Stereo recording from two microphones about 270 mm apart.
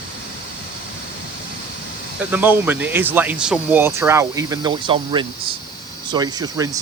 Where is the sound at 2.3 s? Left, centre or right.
Centre.